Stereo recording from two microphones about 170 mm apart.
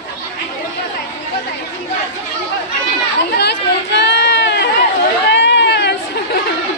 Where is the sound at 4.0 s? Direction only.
85° left.